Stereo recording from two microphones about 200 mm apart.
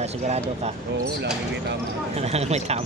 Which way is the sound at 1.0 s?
60° right (ahead or behind).